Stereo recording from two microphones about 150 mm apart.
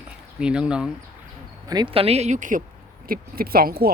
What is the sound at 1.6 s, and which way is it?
Speech, 30° right (ahead or behind).